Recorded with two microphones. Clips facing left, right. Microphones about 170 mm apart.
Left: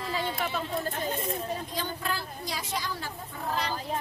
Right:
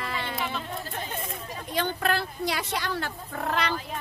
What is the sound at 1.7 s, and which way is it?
Speech, 70° right (ahead or behind).